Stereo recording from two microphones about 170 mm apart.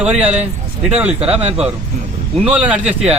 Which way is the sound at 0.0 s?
10° right (ahead or behind).